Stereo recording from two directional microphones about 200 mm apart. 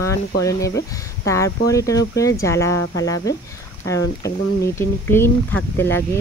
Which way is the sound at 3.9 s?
60° left (ahead or behind).